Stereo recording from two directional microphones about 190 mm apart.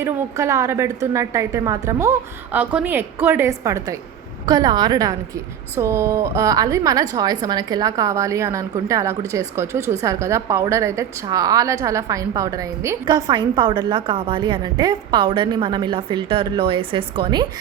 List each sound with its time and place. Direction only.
0.0 s a woman's voice: 15° right (ahead or behind)